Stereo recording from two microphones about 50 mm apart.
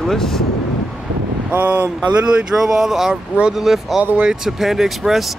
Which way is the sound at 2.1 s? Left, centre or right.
Right.